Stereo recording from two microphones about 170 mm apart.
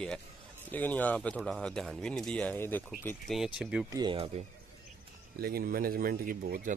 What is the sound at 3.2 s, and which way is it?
Speech, centre (ahead or behind).